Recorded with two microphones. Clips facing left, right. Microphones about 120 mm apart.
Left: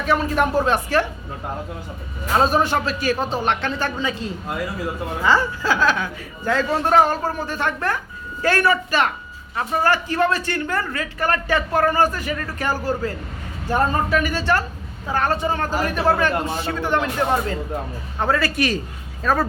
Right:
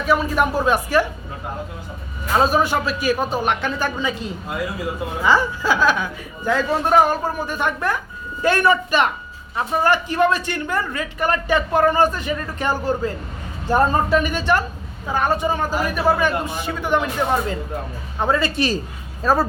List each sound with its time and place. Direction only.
0.0 s a woman's voice: 5° right (ahead or behind)
2.4 s a woman's voice: 10° right (ahead or behind); by 19.5 s 35° right (ahead or behind)